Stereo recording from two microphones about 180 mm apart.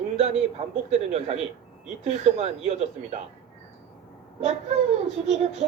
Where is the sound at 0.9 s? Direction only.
35° right (ahead or behind).